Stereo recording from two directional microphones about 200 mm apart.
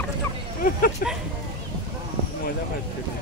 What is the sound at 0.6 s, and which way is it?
Speech, 45° left (ahead or behind).